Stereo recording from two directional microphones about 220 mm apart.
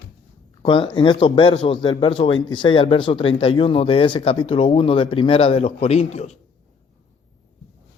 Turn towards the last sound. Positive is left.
turn(degrees=30)  # may be behind; listen again after turning